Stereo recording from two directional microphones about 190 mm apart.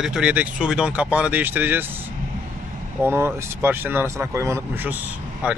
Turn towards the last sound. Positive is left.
turn(degrees=-5)  # may be behind; listen again after turning